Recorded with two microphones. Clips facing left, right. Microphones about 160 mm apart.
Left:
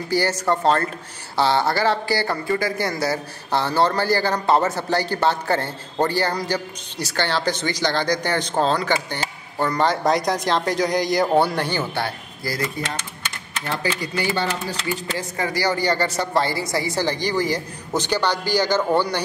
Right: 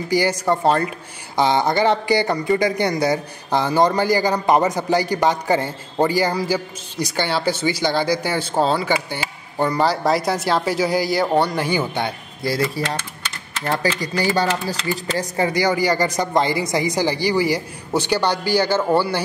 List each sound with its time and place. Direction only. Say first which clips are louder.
0.1 s speech: right 2 dB; 10° right (ahead or behind)
11.6 s speech: right 3 dB; 10° right (ahead or behind)
14.3 s speech: right 4 dB; 35° right (ahead or behind)
15.4 s speech: right 3 dB; 15° right (ahead or behind)